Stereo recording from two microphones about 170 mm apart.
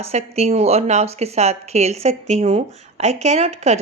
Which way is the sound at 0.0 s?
40° right (ahead or behind).